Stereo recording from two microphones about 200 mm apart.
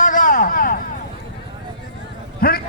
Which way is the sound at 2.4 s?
45° left (ahead or behind).